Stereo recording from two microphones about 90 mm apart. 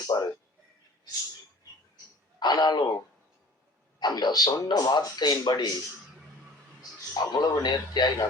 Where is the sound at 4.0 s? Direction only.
50° left (ahead or behind).